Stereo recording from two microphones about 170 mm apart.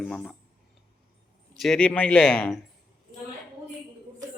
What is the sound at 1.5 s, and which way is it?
A man's voice, centre (ahead or behind).